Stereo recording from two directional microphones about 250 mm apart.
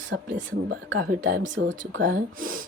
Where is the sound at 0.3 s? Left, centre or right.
Right.